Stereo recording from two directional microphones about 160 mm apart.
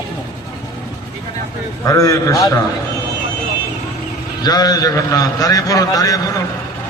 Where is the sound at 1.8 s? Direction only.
20° left (ahead or behind).